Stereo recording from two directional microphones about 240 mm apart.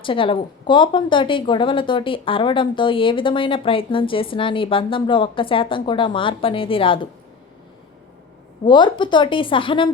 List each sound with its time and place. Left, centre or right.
0.0 s speech: left
8.6 s speech: centre